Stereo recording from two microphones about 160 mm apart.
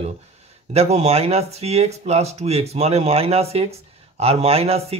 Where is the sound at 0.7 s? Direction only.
45° right (ahead or behind).